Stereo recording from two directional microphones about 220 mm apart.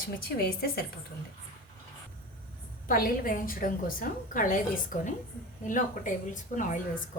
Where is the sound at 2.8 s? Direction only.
40° left (ahead or behind).